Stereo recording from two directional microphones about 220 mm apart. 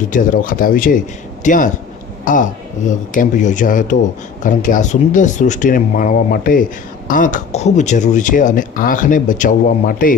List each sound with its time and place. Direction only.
0.1 s speech: 40° left (ahead or behind)